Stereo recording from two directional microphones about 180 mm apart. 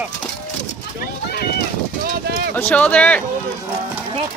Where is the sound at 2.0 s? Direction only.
60° right (ahead or behind).